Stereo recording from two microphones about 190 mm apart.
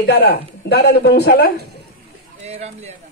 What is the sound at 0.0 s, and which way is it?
A woman's voice, 60° left (ahead or behind).